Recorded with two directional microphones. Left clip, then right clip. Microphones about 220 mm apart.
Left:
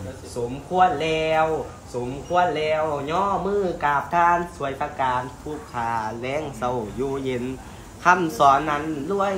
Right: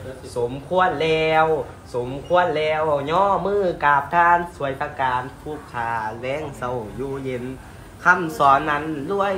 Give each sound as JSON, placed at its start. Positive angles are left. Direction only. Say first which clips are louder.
{"t": 0.4, "sound": "a man's voice", "louder": "even", "side_deg": 0}